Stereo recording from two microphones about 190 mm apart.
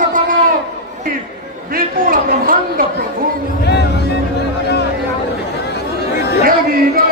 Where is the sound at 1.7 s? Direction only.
50° right (ahead or behind).